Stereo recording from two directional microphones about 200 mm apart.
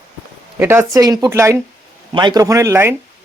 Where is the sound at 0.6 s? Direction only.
10° right (ahead or behind).